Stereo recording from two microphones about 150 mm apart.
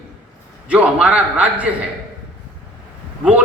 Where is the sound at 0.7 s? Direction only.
10° right (ahead or behind).